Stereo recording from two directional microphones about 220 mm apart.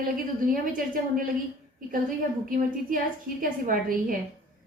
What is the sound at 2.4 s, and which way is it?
A woman's voice, 40° right (ahead or behind).